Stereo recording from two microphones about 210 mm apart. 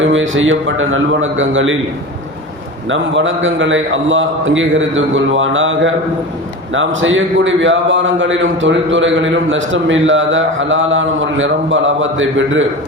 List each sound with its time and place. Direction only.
0.0 s a man's voice: 65° right (ahead or behind)
2.9 s a man's voice: 65° right (ahead or behind)